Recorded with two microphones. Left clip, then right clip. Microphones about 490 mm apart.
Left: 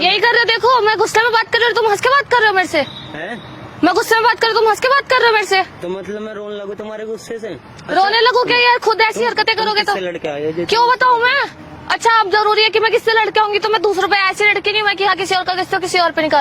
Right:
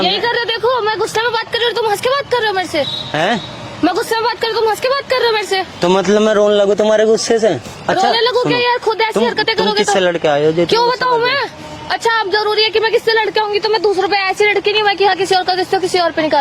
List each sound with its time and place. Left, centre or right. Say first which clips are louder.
0.0 s a sound: left 3 dB; left
3.8 s a sound: left 3 dB; left
6.0 s a man's voice: right 15 dB; right
8.1 s speech: left 1 dB; left
10.0 s speech: right 8 dB; right
10.7 s a woman's voice: left 1 dB; left